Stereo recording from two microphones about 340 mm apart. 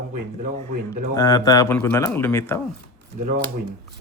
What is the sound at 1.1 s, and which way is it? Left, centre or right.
Speech, centre.